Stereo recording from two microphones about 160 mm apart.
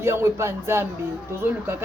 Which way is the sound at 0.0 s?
15° right (ahead or behind).